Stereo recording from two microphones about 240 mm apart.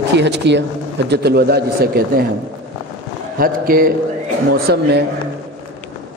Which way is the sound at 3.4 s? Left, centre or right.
Right.